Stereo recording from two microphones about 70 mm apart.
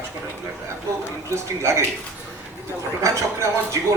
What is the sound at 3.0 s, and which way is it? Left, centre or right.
Speech, right.